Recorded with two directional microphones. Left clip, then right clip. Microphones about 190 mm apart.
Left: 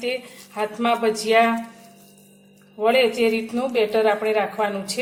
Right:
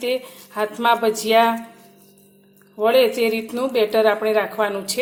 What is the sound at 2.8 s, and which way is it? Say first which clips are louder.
A woman's voice: right 2 dB; 40° right (ahead or behind).